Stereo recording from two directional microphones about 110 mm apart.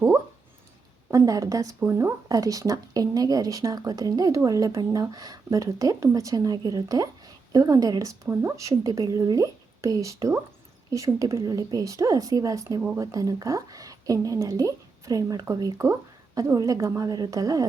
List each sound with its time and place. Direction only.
1.1 s speech: 30° right (ahead or behind)